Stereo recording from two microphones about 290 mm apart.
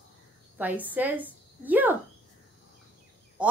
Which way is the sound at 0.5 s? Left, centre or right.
Centre.